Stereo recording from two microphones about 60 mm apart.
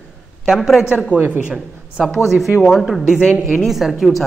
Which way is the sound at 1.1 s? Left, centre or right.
Right.